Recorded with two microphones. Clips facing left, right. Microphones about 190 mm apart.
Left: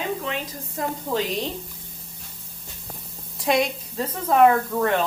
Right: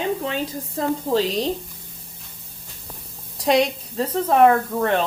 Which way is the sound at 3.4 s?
30° right (ahead or behind).